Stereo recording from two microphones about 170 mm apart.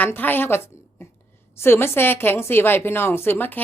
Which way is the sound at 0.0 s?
10° left (ahead or behind).